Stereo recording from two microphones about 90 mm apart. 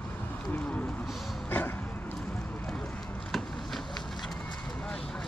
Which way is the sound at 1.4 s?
25° left (ahead or behind).